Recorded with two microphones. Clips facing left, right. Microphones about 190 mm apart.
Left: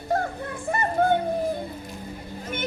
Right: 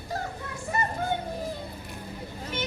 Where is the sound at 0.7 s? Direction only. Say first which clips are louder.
Left 2 dB; 55° left (ahead or behind).